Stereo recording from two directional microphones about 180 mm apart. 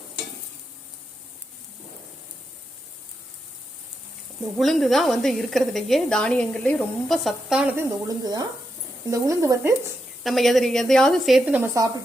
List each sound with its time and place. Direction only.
4.5 s a woman's voice: centre (ahead or behind)
7.8 s a woman's voice: 20° right (ahead or behind)
10.2 s a woman's voice: centre (ahead or behind); by 11.9 s 15° right (ahead or behind)